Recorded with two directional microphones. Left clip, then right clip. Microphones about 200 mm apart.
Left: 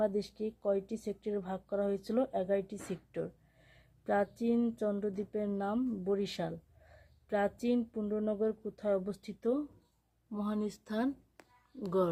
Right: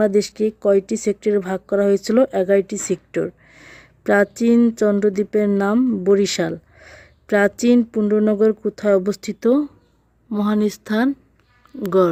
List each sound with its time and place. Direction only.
0.0 s speech: 50° right (ahead or behind)